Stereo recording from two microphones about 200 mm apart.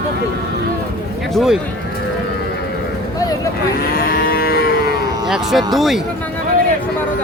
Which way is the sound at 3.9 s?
50° left (ahead or behind).